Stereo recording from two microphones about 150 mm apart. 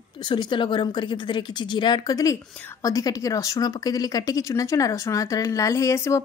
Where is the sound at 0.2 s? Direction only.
30° left (ahead or behind).